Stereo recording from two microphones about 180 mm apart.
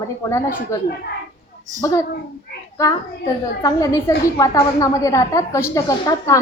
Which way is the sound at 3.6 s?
20° left (ahead or behind).